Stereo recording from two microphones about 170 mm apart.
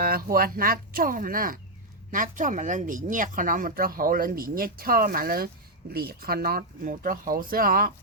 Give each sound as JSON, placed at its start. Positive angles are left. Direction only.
{"t": 0.0, "sound": "speech", "side_deg": -60}